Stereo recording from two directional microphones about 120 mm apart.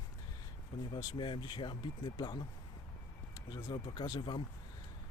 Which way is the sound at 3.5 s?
40° left (ahead or behind).